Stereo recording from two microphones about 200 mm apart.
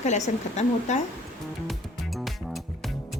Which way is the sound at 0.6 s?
35° left (ahead or behind).